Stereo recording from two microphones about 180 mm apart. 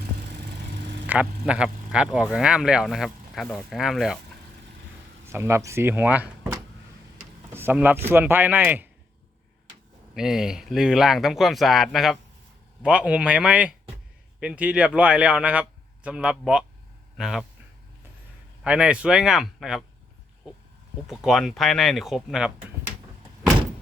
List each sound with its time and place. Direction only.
1.0 s speech: 10° right (ahead or behind)
5.2 s speech: 15° right (ahead or behind)
10.2 s speech: 5° right (ahead or behind)
18.6 s speech: 5° right (ahead or behind)
21.1 s speech: centre (ahead or behind)